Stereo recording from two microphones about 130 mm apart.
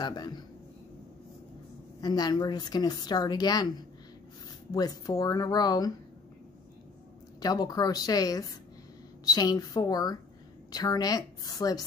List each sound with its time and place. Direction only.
0.0 s a man's voice: 30° left (ahead or behind)
2.0 s a woman's voice: 30° left (ahead or behind)
4.7 s a woman's voice: 30° left (ahead or behind)
7.3 s a woman's voice: 30° left (ahead or behind)